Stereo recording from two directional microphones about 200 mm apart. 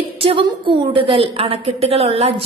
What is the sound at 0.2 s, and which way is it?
A woman's voice, 25° right (ahead or behind).